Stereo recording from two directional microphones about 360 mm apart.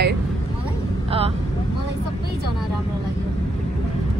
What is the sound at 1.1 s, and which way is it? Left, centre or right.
Speech, centre.